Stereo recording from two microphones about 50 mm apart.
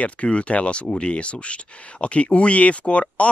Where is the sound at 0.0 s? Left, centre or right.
Left.